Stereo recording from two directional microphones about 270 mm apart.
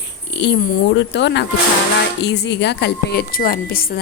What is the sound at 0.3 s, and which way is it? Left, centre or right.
A woman's voice, left.